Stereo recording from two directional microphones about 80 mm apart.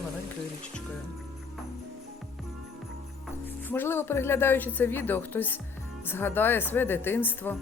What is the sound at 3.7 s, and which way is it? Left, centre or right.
A woman's voice, left.